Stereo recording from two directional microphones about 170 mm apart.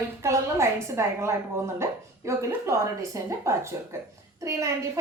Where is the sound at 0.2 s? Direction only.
15° right (ahead or behind).